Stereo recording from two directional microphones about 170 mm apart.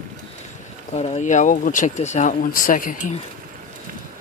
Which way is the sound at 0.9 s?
40° left (ahead or behind).